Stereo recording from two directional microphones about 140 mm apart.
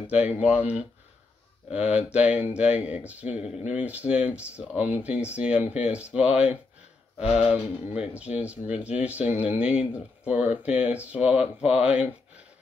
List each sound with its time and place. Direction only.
0.1 s speech: 10° right (ahead or behind)
7.4 s speech: 10° right (ahead or behind)